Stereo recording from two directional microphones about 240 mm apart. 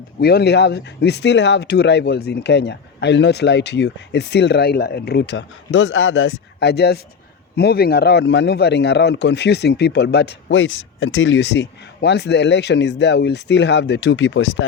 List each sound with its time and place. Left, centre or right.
0.2 s a man's voice: left